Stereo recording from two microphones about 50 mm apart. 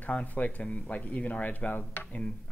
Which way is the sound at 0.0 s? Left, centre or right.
Left.